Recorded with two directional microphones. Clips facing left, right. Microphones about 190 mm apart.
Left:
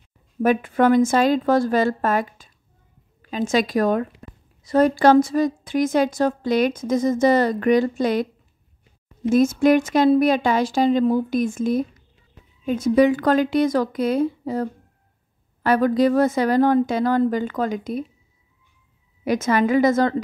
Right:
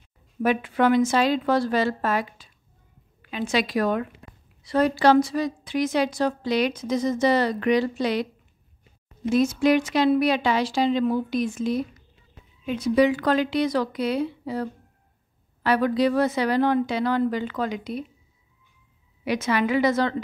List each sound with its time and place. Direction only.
0.4 s a woman's voice: 50° left (ahead or behind)
9.3 s a woman's voice: 50° left (ahead or behind)
19.2 s a woman's voice: 45° left (ahead or behind)